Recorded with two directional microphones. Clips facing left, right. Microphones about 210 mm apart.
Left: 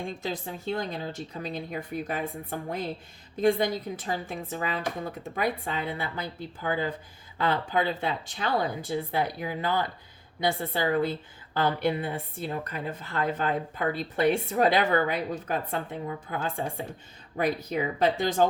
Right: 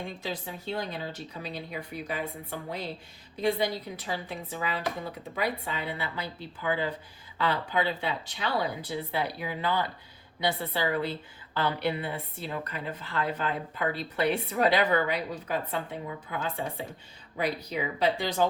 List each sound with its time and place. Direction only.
0.2 s a woman's voice: 45° left (ahead or behind)